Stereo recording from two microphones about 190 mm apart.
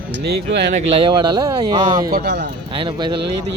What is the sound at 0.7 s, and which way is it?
Speech, 30° right (ahead or behind).